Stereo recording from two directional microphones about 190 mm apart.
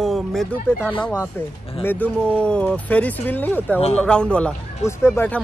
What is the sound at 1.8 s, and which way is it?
Speech, 10° left (ahead or behind).